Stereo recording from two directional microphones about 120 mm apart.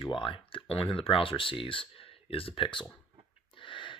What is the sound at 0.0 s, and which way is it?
Speech, 45° left (ahead or behind).